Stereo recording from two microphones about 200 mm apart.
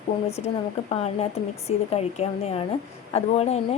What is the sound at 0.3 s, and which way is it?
Speech, 30° left (ahead or behind).